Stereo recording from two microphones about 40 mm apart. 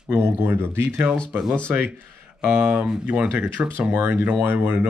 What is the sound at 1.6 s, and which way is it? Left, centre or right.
Speech, right.